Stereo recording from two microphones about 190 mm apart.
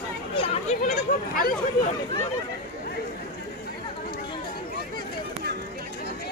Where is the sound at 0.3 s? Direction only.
30° left (ahead or behind).